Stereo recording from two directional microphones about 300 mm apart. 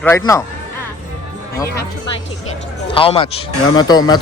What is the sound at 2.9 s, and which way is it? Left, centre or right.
Speech, centre.